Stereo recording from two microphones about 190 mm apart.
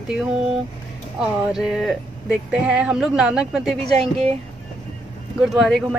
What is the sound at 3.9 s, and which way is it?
Speech, 30° right (ahead or behind).